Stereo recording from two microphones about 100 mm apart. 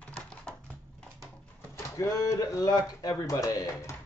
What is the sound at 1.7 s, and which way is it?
Speech, 30° left (ahead or behind).